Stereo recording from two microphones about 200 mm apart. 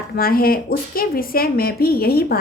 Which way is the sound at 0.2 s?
50° left (ahead or behind).